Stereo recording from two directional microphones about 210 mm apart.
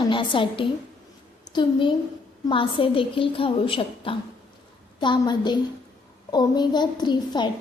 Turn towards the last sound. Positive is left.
turn(degrees=20)  # may be behind; listen again after turning